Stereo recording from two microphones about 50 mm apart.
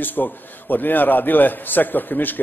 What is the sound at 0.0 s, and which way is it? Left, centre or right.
A man's voice, left.